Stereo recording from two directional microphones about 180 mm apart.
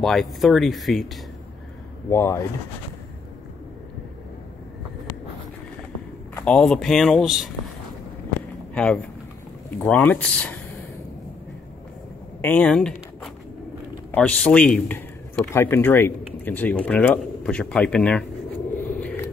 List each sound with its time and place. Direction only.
0.0 s speech: centre (ahead or behind)
2.0 s a man's voice: 15° left (ahead or behind)
6.3 s speech: 5° left (ahead or behind)
8.7 s a man's voice: 5° left (ahead or behind)
12.4 s a sound: 10° left (ahead or behind)
14.1 s a man's voice: 5° left (ahead or behind)